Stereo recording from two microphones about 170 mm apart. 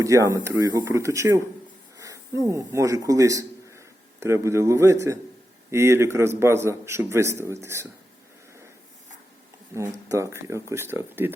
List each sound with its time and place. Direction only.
0.0 s a man's voice: 20° right (ahead or behind)
9.7 s a man's voice: 15° right (ahead or behind)